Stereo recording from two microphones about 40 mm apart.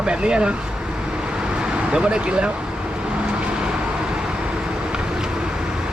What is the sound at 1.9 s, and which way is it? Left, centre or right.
Speech, right.